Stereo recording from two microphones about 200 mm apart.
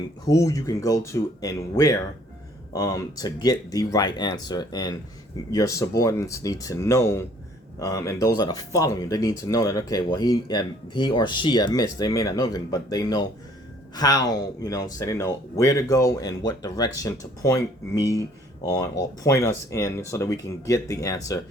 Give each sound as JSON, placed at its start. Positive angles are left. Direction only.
{"t": 0.3, "sound": "speech", "side_deg": 15}